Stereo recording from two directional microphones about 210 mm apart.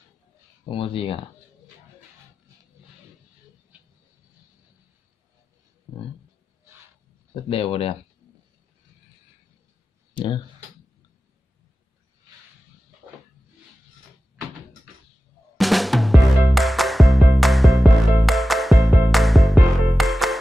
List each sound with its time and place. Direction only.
0.7 s speech: 25° left (ahead or behind)
5.9 s a sound: 5° left (ahead or behind)
7.4 s speech: 25° left (ahead or behind)
10.1 s speech: 20° left (ahead or behind)
15.5 s music: centre (ahead or behind)